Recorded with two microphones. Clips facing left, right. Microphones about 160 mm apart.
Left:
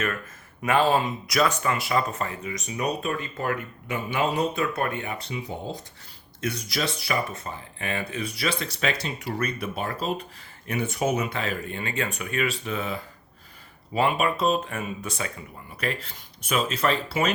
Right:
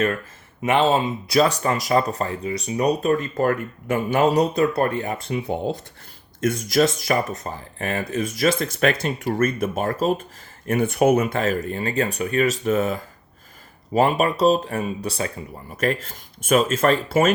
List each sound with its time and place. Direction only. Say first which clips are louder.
0.6 s speech: right 3 dB; 25° right (ahead or behind); by 17.3 s 45° right (ahead or behind)